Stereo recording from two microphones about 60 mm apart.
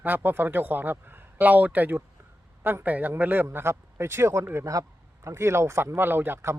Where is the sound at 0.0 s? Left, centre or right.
Right.